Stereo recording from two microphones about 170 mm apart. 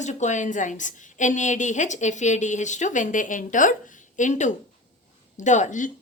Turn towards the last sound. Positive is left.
turn(degrees=45)  # may be behind; listen again after turning